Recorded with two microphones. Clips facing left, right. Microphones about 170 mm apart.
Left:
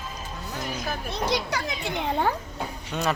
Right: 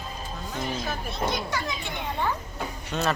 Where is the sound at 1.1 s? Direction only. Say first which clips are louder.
Left 3 dB; 85° left.